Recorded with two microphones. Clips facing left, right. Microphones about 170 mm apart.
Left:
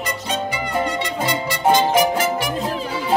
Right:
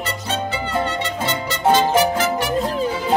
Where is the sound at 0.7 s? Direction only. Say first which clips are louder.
Left 1 dB; 10° left (ahead or behind).